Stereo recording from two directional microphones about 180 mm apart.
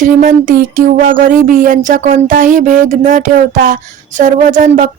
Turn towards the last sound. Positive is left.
turn(degrees=-45)  # may be behind; listen again after turning